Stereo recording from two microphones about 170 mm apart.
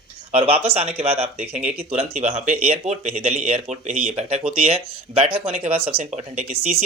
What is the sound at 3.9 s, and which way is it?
Speech, 5° right (ahead or behind).